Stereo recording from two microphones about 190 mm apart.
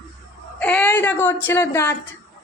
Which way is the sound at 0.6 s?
10° left (ahead or behind).